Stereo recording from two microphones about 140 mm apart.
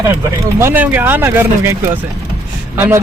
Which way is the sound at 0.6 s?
15° right (ahead or behind).